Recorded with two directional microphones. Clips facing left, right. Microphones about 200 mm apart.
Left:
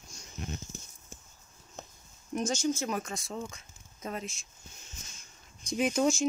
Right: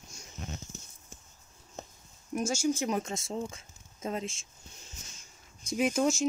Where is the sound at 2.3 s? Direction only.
10° right (ahead or behind); by 4.4 s 25° right (ahead or behind).